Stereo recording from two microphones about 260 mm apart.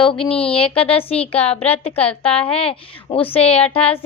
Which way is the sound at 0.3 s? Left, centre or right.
Left.